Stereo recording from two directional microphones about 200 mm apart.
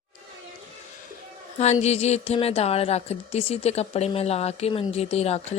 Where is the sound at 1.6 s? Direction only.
35° left (ahead or behind).